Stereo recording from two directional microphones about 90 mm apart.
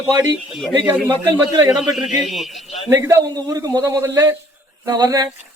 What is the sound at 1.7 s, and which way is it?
Speech, 5° right (ahead or behind).